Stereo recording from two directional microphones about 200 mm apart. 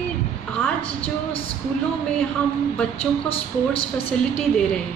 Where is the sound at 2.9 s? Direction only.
30° left (ahead or behind).